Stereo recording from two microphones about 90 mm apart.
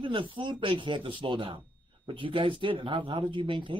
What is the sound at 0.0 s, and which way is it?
Speech, 65° right (ahead or behind).